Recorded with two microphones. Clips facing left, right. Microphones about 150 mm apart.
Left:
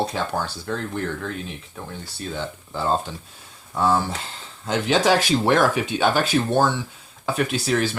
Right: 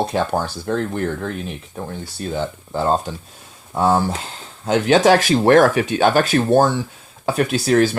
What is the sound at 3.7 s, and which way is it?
Speech, 35° right (ahead or behind).